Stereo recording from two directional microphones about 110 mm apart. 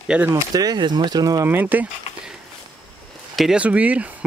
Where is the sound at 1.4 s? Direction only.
15° right (ahead or behind).